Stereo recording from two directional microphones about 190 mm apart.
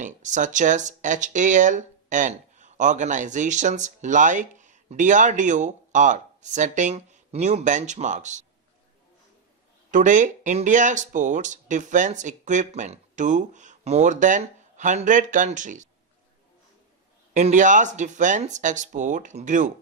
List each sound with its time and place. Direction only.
0.0 s speech: 40° right (ahead or behind)
9.9 s speech: 40° right (ahead or behind)
17.3 s speech: 40° right (ahead or behind)